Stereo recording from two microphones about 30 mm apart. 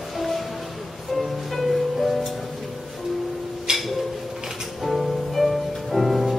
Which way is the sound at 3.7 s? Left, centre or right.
Right.